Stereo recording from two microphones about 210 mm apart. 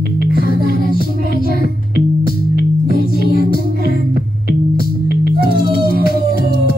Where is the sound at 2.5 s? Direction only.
45° left (ahead or behind).